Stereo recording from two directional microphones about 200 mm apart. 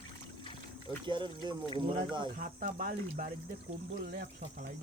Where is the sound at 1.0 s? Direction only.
25° right (ahead or behind).